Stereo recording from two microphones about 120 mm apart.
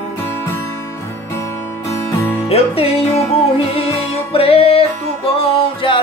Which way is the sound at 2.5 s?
55° left (ahead or behind).